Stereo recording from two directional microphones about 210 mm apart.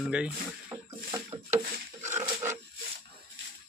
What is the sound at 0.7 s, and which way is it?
Boat, 15° right (ahead or behind).